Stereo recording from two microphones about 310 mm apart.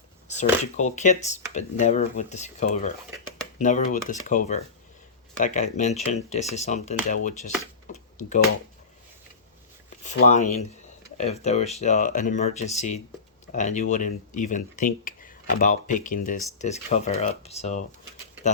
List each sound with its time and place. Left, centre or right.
0.8 s speech: left
10.0 s speech: left